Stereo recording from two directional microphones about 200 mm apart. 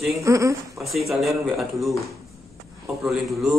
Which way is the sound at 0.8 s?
Centre (ahead or behind).